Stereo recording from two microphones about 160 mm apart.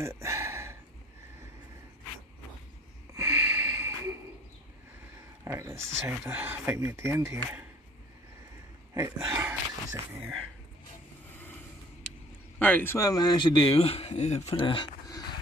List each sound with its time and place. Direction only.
0.0 s a sound: 15° right (ahead or behind)
3.2 s snort: 20° right (ahead or behind)
5.4 s speech: 15° right (ahead or behind)
8.9 s speech: 10° right (ahead or behind)
12.5 s speech: 10° left (ahead or behind); by 14.5 s 45° left (ahead or behind)
14.5 s a sound: 30° left (ahead or behind)